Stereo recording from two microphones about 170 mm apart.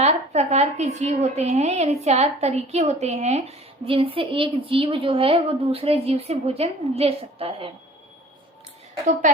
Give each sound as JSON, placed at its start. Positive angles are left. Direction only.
{"t": 0.0, "sound": "a woman's voice", "side_deg": -40}